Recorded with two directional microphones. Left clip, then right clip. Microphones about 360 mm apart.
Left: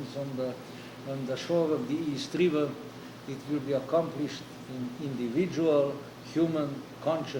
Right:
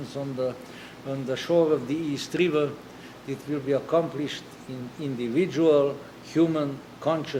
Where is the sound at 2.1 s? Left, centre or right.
Right.